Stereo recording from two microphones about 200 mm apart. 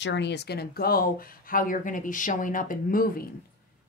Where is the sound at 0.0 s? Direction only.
60° left (ahead or behind); by 3.3 s 45° left (ahead or behind).